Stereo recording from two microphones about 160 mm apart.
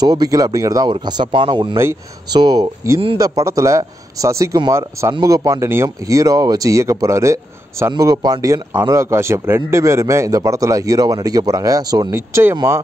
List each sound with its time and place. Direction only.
0.0 s a man's voice: 25° right (ahead or behind)